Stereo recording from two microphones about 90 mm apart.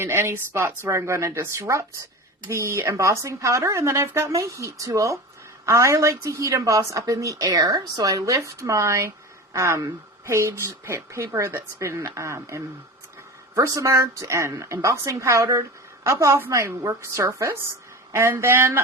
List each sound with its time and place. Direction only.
0.0 s speech: 30° right (ahead or behind)